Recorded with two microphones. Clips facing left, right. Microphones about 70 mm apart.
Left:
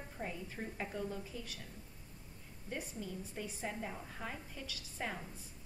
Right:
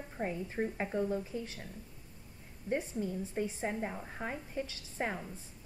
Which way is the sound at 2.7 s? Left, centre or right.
Right.